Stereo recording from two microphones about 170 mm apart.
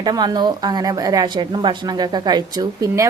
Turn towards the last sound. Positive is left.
turn(degrees=-20)  # may be behind; listen again after turning